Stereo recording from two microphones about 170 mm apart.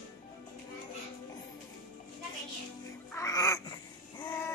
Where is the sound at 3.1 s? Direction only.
20° left (ahead or behind).